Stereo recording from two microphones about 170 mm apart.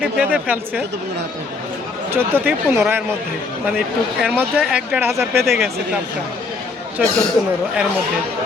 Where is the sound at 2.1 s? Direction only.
15° right (ahead or behind).